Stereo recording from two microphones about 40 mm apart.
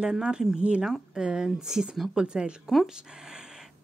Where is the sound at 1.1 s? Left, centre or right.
Centre.